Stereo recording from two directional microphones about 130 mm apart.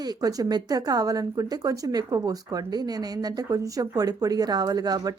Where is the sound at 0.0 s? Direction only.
30° right (ahead or behind).